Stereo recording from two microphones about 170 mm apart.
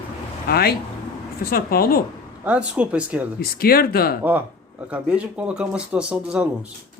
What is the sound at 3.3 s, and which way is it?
Speech, 60° left (ahead or behind).